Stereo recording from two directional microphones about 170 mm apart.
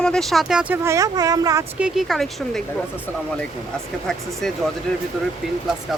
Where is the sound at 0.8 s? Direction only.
20° right (ahead or behind).